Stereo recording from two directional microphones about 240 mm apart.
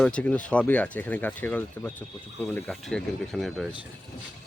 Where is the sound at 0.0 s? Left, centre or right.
Centre.